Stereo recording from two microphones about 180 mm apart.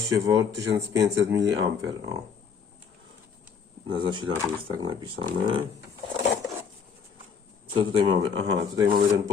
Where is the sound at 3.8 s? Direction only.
25° right (ahead or behind).